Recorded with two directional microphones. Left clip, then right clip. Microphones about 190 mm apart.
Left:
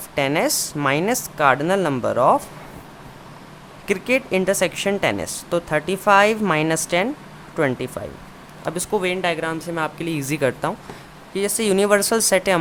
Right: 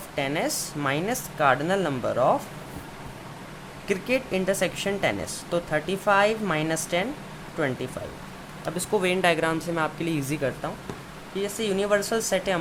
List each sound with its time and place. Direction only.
0.2 s a woman's voice: 30° left (ahead or behind)
3.8 s a woman's voice: 20° left (ahead or behind)
10.6 s speech: 35° left (ahead or behind)